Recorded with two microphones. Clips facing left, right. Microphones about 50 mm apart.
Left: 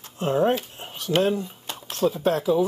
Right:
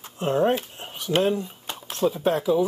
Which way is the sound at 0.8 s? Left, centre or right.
Centre.